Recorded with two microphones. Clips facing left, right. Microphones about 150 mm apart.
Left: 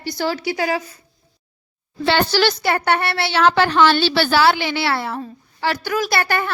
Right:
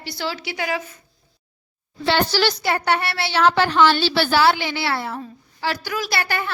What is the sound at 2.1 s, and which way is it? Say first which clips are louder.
A woman's voice: left 2 dB; 60° left (ahead or behind).